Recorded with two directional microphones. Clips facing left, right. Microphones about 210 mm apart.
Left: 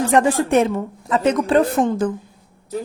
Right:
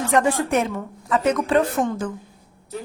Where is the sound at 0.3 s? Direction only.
30° left (ahead or behind).